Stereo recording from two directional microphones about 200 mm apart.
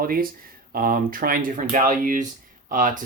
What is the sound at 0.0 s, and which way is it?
Speech, 45° right (ahead or behind).